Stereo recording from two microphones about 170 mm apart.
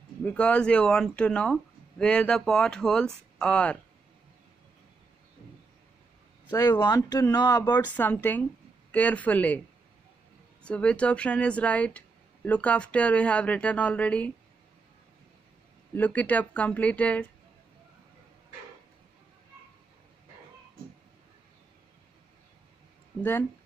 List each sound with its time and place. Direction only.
0.2 s speech: 5° left (ahead or behind)
6.4 s speech: 20° left (ahead or behind)
7.9 s a woman's voice: 10° left (ahead or behind)
10.6 s a woman's voice: 5° left (ahead or behind)
15.9 s a woman's voice: 10° left (ahead or behind)